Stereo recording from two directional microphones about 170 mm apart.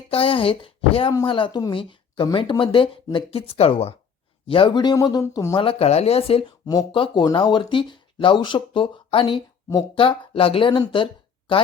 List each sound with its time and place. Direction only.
0.1 s a woman's voice: 35° left (ahead or behind); by 5.5 s 15° left (ahead or behind)
5.5 s a woman's voice: 35° left (ahead or behind)